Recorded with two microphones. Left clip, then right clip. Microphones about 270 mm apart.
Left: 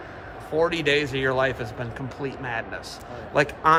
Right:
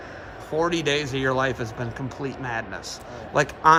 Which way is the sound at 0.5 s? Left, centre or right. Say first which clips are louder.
Left 1 dB; right.